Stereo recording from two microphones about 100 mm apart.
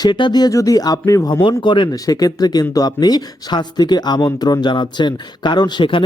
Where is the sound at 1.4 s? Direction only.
55° left (ahead or behind).